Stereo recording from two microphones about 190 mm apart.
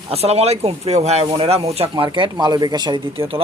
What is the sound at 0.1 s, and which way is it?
Speech, 35° right (ahead or behind).